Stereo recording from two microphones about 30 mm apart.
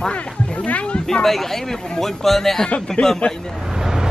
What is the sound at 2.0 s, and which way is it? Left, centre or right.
Speech, centre.